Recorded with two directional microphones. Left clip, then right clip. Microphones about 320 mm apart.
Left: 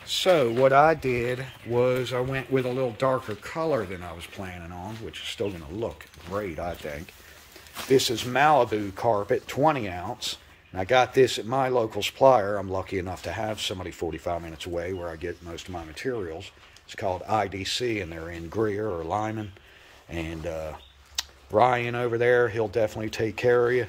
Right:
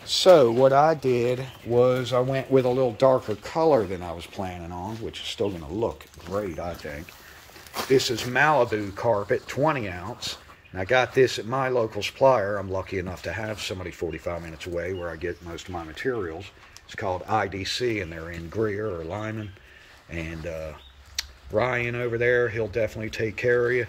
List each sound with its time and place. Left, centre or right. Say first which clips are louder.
0.2 s speech: right 6 dB; centre
0.5 s speech: even; centre
6.3 s speech: right 1 dB; centre